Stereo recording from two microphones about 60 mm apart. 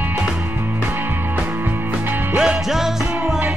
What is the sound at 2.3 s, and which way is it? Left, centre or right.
Music, centre.